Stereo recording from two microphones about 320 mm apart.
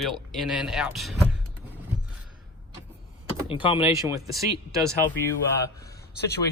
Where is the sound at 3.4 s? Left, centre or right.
Centre.